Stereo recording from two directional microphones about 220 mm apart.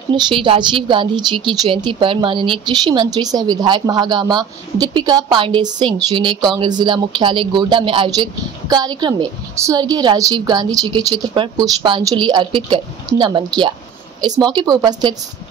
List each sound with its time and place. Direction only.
0.1 s speech: 20° right (ahead or behind)